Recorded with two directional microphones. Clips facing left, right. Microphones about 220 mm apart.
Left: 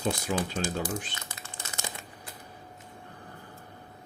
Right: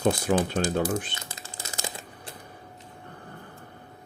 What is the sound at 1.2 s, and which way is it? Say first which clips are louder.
Crumpling: right 2 dB; 35° right (ahead or behind).